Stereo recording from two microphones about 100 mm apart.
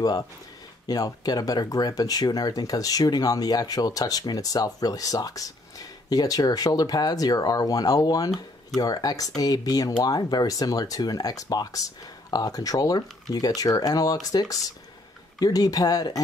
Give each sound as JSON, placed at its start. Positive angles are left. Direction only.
{"t": 0.8, "sound": "speech", "side_deg": 40}
{"t": 15.4, "sound": "speech", "side_deg": 40}